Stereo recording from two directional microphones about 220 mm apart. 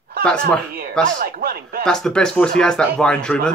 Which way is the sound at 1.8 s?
5° left (ahead or behind).